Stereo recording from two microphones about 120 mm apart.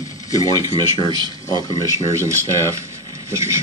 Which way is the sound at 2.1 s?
25° right (ahead or behind).